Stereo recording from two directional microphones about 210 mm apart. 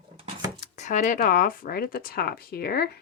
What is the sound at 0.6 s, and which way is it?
Speech, 35° left (ahead or behind).